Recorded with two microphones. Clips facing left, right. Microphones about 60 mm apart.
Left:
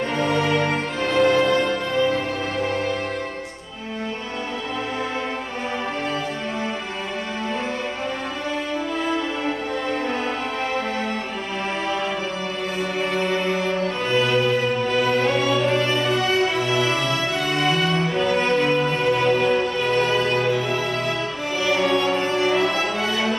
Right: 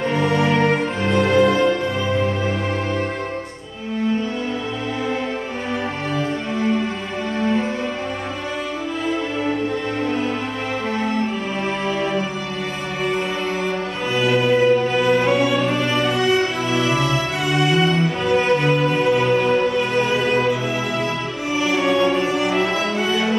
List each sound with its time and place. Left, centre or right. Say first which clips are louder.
0.2 s music: right 1 dB; centre
0.5 s music: right 4 dB; right
1.0 s music: right 1 dB; centre
14.1 s music: right 3 dB; centre
21.6 s music: right 2 dB; centre